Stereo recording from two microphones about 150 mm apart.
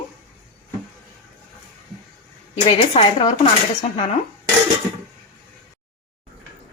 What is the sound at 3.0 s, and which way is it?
Speech, 45° left (ahead or behind).